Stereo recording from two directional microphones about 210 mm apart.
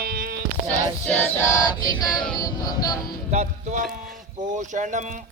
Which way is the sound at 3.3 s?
35° right (ahead or behind).